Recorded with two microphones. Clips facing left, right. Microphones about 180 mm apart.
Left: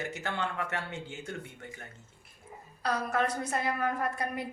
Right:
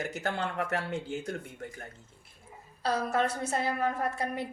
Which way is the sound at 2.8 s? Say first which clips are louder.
Right 2 dB; 25° right (ahead or behind).